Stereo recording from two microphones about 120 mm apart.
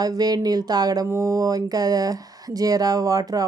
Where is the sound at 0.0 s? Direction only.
30° right (ahead or behind).